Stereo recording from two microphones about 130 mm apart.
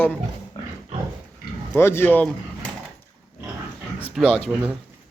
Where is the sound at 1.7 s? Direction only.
20° left (ahead or behind).